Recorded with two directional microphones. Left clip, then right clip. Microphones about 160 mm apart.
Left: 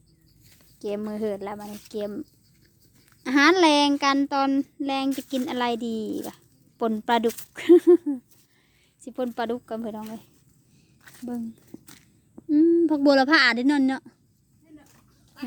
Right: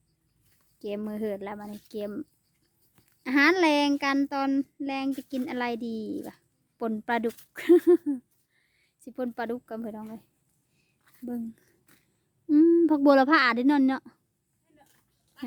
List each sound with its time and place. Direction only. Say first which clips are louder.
0.8 s a woman's voice: left 4 dB; 25° right (ahead or behind)
3.2 s a child's voice: left 4 dB; 20° right (ahead or behind)
7.5 s a woman's voice: left 4 dB; 30° right (ahead or behind)
9.0 s speech: left 4 dB; 20° right (ahead or behind)
11.0 s a sound: left 4 dB; 60° left (ahead or behind)
11.3 s a woman's voice: left 2 dB; 40° right (ahead or behind)
12.5 s speech: left 1 dB; 55° right (ahead or behind)